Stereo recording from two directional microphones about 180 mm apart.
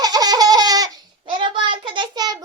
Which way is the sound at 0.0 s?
20° right (ahead or behind).